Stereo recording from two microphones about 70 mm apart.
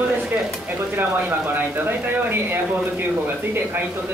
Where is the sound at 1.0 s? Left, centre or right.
Right.